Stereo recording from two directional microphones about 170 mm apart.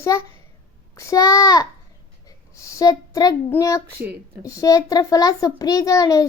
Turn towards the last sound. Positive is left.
turn(degrees=20)  # may be behind; listen again after turning